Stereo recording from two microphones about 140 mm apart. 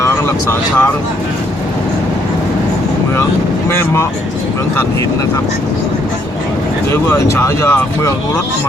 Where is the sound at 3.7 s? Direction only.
20° left (ahead or behind).